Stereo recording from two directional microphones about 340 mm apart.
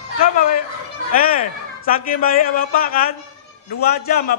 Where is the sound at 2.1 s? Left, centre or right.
Left.